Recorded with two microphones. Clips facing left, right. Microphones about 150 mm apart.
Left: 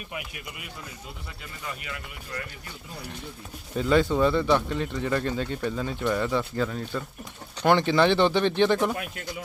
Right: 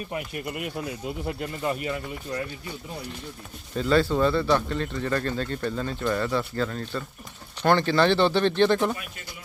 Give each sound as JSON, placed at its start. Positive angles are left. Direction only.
{"t": 0.1, "sound": "speech", "side_deg": -50}
{"t": 3.8, "sound": "speech", "side_deg": 15}